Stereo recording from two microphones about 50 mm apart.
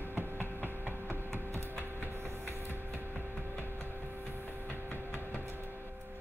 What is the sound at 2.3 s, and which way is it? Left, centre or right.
Printer, right.